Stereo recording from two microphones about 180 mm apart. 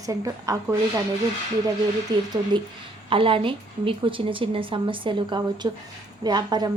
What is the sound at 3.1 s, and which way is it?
A woman's voice, 30° right (ahead or behind).